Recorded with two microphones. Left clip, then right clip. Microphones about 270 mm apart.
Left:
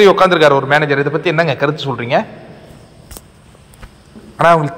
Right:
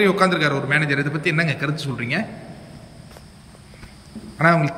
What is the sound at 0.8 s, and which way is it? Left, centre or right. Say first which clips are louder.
A man's voice: left 7 dB; centre.